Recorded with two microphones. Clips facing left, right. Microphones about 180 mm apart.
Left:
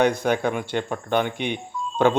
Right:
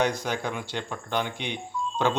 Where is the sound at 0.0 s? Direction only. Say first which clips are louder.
Left 6 dB; 55° left (ahead or behind).